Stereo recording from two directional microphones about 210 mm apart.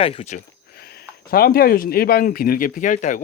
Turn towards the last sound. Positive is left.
turn(degrees=35)  # may be behind; listen again after turning